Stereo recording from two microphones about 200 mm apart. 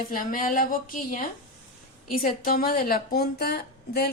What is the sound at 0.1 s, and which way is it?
A woman's voice, 45° left (ahead or behind).